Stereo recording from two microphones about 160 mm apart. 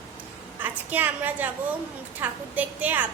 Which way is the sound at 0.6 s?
10° right (ahead or behind).